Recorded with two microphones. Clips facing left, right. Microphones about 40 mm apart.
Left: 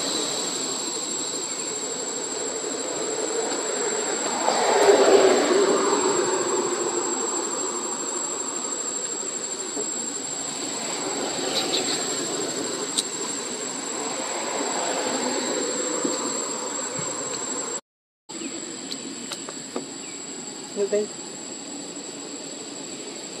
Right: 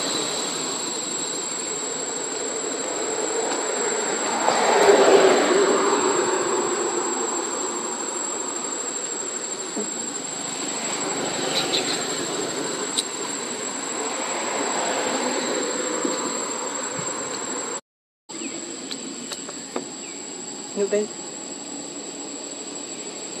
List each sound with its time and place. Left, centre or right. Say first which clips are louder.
3.0 s train: right 1 dB; right
3.8 s a sound: right 2 dB; right
10.9 s vehicle: right 2 dB; right
13.9 s vehicle: right 2 dB; right